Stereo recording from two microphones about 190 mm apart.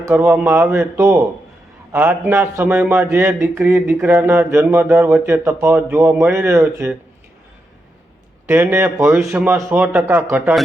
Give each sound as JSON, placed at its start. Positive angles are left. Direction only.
{"t": 0.0, "sound": "a man's voice", "side_deg": -15}
{"t": 8.4, "sound": "a man's voice", "side_deg": -10}